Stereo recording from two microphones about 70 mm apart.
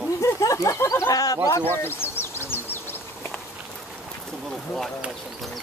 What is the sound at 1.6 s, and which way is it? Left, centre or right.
Insect, left.